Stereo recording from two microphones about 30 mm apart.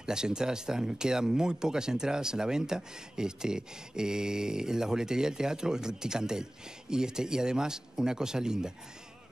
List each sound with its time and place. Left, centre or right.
0.0 s speech: right